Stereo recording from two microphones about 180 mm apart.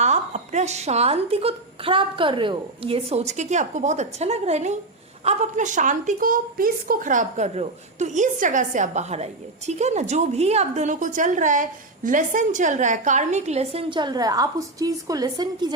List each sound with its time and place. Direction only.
0.0 s a woman's voice: 40° right (ahead or behind); by 15.7 s 20° right (ahead or behind)